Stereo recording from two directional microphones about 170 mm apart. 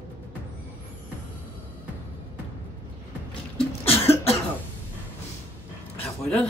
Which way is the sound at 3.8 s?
35° left (ahead or behind).